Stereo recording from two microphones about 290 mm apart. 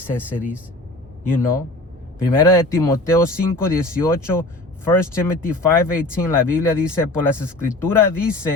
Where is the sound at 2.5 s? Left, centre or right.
Centre.